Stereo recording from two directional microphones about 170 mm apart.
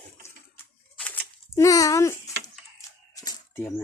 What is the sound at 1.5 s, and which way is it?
Speech, 20° left (ahead or behind).